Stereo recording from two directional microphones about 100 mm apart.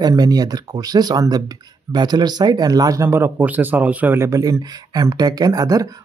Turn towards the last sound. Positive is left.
turn(degrees=-40)  # may be behind; listen again after turning